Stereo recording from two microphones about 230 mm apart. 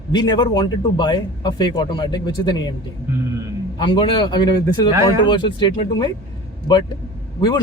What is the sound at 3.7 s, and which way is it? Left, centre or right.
Speech, centre.